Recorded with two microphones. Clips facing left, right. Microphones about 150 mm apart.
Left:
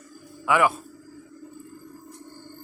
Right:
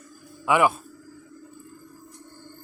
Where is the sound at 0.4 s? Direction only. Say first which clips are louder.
Right 1 dB; 20° right (ahead or behind).